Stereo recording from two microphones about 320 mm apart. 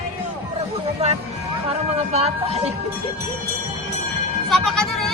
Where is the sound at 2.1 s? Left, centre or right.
Centre.